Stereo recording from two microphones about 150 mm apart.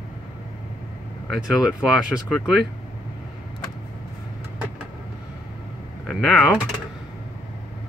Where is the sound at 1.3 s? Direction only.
5° right (ahead or behind).